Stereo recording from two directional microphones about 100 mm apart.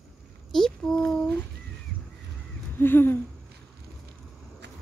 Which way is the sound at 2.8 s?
20° left (ahead or behind).